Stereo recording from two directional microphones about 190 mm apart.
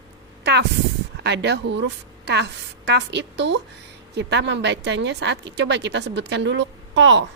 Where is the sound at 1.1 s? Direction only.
65° right (ahead or behind).